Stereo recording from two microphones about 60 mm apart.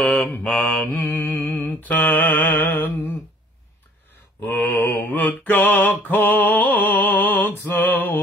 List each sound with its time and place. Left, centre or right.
0.0 s mantra: centre
0.8 s mantra: left
4.4 s music: left